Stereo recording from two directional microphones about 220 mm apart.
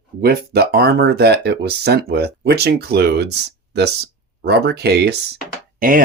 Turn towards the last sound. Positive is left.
turn(degrees=-40)  # may be behind; listen again after turning